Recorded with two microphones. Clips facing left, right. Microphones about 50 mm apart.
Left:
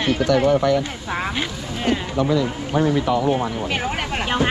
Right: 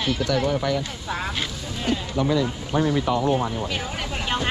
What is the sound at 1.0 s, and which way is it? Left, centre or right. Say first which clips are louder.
Speech: left 3 dB; left.